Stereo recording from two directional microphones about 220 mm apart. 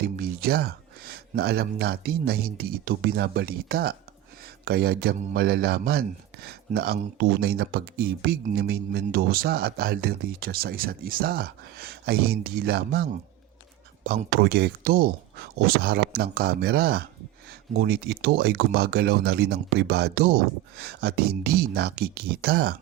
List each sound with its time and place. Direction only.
0.2 s speech: 45° right (ahead or behind)